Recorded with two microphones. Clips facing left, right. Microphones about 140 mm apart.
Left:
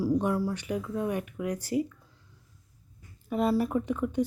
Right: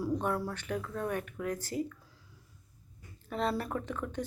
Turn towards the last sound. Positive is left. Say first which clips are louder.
# left 8 dB
turn(degrees=10)  # may be behind; listen again after turning